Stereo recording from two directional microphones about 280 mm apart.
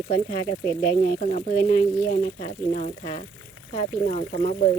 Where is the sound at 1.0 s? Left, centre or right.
Left.